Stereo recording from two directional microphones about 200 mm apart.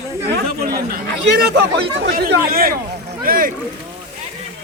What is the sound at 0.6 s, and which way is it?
Speech, 50° right (ahead or behind).